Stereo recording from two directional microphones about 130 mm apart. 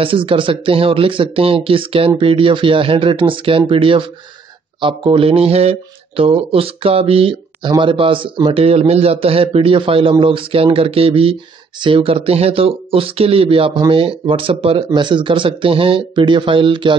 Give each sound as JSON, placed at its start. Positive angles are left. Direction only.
{"t": 0.0, "sound": "speech", "side_deg": -45}
{"t": 8.5, "sound": "speech", "side_deg": -50}